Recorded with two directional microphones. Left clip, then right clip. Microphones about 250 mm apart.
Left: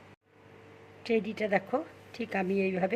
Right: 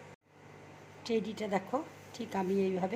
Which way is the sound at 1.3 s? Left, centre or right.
Left.